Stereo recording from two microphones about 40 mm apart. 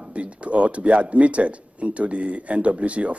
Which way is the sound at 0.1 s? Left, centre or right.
Right.